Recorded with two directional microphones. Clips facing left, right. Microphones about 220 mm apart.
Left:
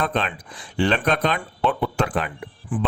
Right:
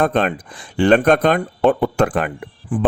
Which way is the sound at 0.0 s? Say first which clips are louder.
Right 7 dB; 50° right (ahead or behind).